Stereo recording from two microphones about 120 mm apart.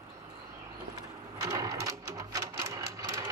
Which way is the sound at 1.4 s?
30° right (ahead or behind).